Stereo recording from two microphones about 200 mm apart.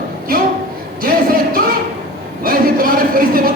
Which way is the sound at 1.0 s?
45° right (ahead or behind).